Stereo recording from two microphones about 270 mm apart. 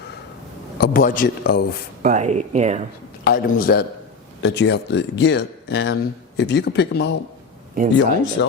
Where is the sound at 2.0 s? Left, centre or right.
Right.